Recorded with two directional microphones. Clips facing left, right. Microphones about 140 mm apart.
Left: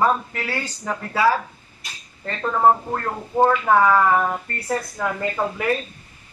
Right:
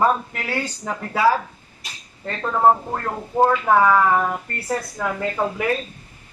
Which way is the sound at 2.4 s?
5° right (ahead or behind).